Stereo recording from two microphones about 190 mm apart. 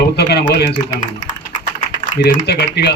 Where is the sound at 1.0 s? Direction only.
40° left (ahead or behind).